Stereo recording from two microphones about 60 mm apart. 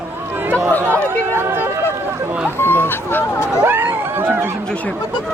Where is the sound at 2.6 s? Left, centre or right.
Left.